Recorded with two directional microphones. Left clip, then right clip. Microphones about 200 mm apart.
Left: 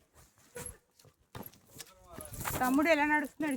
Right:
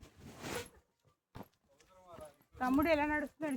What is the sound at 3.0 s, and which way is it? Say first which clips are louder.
Speech: left 6 dB; 20° right (ahead or behind).